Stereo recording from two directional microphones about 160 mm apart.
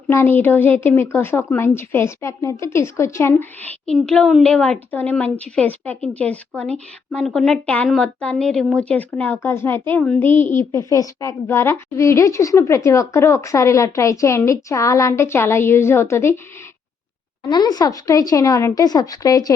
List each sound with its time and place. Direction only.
0.1 s a woman's voice: 15° left (ahead or behind)
17.4 s a woman's voice: 25° left (ahead or behind)